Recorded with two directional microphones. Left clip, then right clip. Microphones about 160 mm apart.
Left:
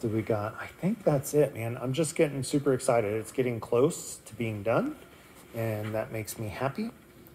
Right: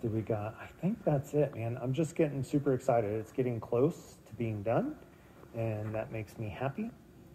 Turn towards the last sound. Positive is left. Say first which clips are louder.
# left 5 dB
turn(degrees=30)  # may be behind; listen again after turning